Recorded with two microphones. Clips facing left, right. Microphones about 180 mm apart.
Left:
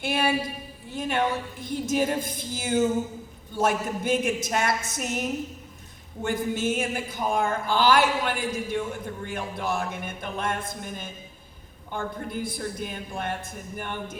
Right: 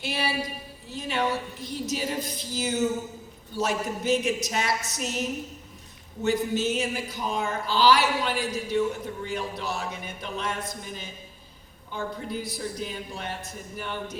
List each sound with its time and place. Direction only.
0.0 s speech: 50° left (ahead or behind)
6.2 s speech: 50° left (ahead or behind)